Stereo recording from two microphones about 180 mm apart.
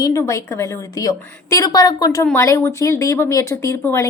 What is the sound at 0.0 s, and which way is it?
Speech, 15° left (ahead or behind).